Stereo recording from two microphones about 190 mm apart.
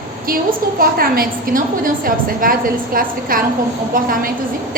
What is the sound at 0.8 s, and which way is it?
A woman's voice, 50° right (ahead or behind).